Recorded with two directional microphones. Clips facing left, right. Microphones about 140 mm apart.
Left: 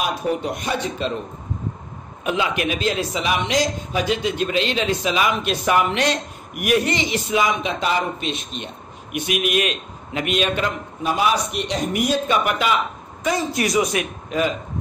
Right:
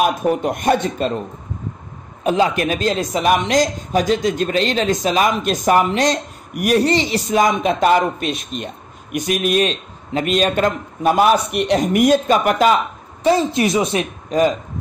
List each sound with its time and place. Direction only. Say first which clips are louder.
0.0 s speech: right 6 dB; 50° right (ahead or behind)
2.2 s a woman's voice: right 5 dB; 40° right (ahead or behind)
9.1 s a woman's voice: right 4 dB; 40° right (ahead or behind)
13.2 s speech: right 6 dB; 30° right (ahead or behind)
14.3 s a woman's voice: right 6 dB; 35° right (ahead or behind)